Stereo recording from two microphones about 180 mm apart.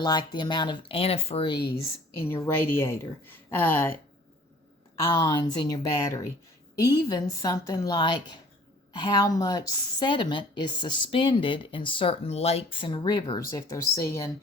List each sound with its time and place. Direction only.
0.0 s a woman's voice: 25° left (ahead or behind)
2.1 s a woman's voice: 15° left (ahead or behind)
5.0 s a woman's voice: 20° left (ahead or behind)